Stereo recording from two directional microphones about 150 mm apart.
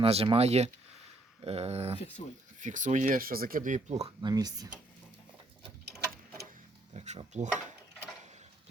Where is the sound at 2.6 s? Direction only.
55° right (ahead or behind).